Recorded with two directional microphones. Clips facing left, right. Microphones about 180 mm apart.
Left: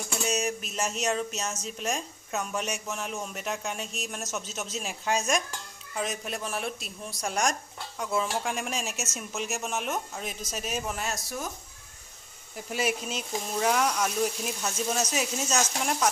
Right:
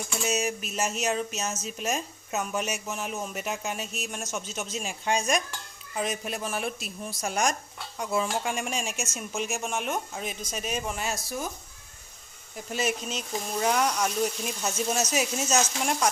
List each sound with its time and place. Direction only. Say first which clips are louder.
0.3 s a woman's voice: right 1 dB; centre (ahead or behind)
12.5 s a woman's voice: even; 5° left (ahead or behind)
14.6 s speech: right 2 dB; 15° right (ahead or behind)
15.4 s a woman's voice: right 2 dB; centre (ahead or behind)